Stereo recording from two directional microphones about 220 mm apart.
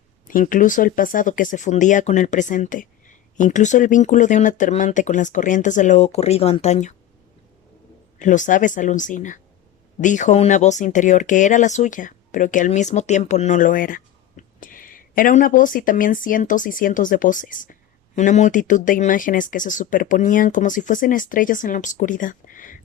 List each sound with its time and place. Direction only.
0.3 s speech: 40° left (ahead or behind)
8.2 s speech: 35° left (ahead or behind)